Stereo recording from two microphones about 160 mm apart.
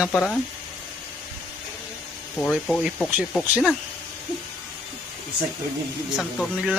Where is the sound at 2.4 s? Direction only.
5° left (ahead or behind).